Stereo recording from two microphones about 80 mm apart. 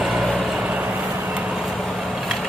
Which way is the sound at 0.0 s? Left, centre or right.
Centre.